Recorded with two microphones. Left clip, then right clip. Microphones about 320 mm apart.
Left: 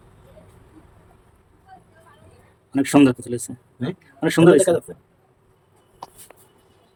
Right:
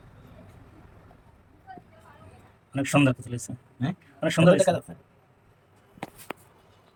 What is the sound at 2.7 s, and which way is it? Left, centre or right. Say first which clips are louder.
Speech: left 7 dB; centre.